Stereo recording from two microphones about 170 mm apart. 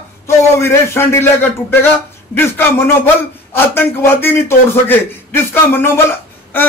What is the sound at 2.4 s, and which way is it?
A man's voice, 10° left (ahead or behind).